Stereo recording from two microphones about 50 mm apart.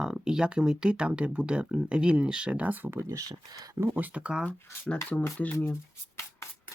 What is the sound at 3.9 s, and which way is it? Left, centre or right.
Speech, right.